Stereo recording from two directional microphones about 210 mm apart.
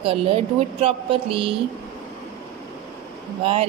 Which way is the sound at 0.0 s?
25° right (ahead or behind).